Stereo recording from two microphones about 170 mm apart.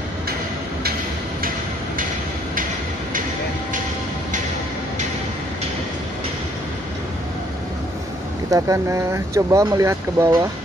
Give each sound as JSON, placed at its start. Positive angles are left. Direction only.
{"t": 8.5, "sound": "speech", "side_deg": -20}